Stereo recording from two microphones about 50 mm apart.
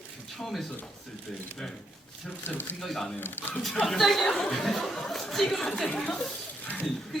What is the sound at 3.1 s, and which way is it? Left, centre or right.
Speech, left.